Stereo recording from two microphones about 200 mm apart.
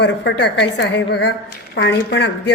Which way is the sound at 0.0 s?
60° left (ahead or behind).